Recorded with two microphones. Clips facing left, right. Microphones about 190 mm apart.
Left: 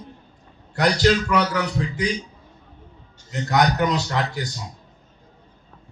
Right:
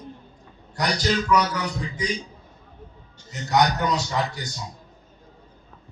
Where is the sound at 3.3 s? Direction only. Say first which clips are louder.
Left 1 dB; 65° left (ahead or behind).